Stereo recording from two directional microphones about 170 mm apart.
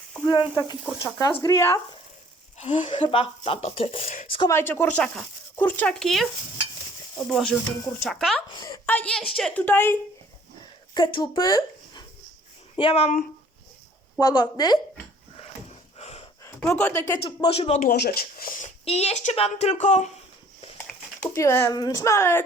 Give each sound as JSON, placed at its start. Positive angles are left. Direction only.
{"t": 0.3, "sound": "a woman's voice", "side_deg": 25}
{"t": 2.6, "sound": "speech", "side_deg": 30}
{"t": 4.4, "sound": "speech", "side_deg": 15}
{"t": 7.3, "sound": "speech", "side_deg": 0}
{"t": 8.5, "sound": "a woman's voice", "side_deg": 20}
{"t": 8.9, "sound": "speech", "side_deg": 10}
{"t": 10.9, "sound": "speech", "side_deg": 25}
{"t": 14.2, "sound": "a woman's voice", "side_deg": 25}
{"t": 16.0, "sound": "a sound", "side_deg": 40}
{"t": 16.7, "sound": "speech", "side_deg": 15}
{"t": 17.2, "sound": "speech", "side_deg": 30}
{"t": 17.8, "sound": "speech", "side_deg": 70}
{"t": 18.9, "sound": "speech", "side_deg": 40}
{"t": 21.3, "sound": "speech", "side_deg": 15}